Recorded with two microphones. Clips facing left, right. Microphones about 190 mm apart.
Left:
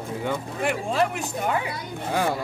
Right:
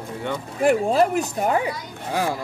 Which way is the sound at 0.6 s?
40° right (ahead or behind).